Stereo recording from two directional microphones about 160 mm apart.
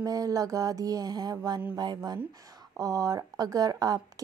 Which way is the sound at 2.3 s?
25° right (ahead or behind).